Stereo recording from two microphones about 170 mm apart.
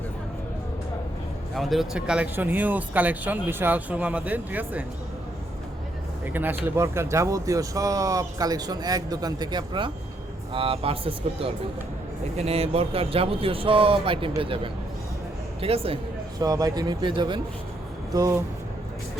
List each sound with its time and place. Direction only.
1.5 s speech: centre (ahead or behind)
6.3 s speech: 10° right (ahead or behind); by 16.0 s 35° right (ahead or behind)
16.4 s speech: 20° right (ahead or behind)